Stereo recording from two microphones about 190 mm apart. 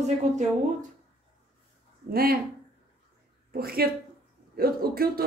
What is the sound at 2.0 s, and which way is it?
Speech, 50° right (ahead or behind).